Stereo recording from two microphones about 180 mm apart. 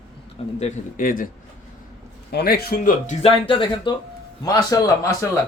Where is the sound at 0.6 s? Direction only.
50° left (ahead or behind).